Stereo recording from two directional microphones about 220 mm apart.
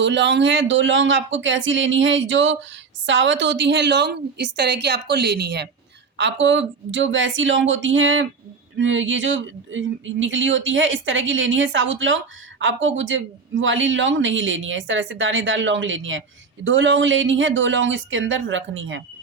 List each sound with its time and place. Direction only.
0.0 s a woman's voice: 55° right (ahead or behind)